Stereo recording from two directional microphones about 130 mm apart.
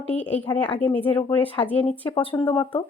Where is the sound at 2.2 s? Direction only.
40° left (ahead or behind).